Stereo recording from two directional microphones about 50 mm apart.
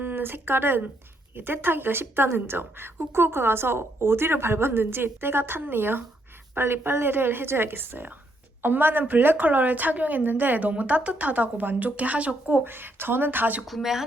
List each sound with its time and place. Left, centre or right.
0.0 s a woman's voice: right
12.5 s a woman's voice: right
13.7 s speech: centre